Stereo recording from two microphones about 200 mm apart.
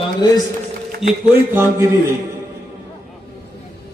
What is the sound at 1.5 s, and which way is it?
Speech, 15° right (ahead or behind).